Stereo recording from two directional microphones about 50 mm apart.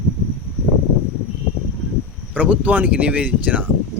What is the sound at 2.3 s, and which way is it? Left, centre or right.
Speech, right.